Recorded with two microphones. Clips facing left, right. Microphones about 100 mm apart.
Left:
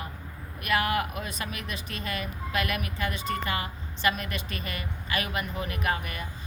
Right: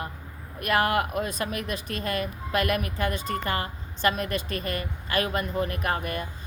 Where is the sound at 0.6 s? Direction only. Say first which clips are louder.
Right 3 dB; 45° right (ahead or behind).